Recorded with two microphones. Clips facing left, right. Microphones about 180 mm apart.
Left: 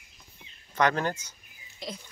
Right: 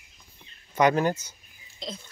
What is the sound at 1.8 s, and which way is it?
Frog, 10° left (ahead or behind).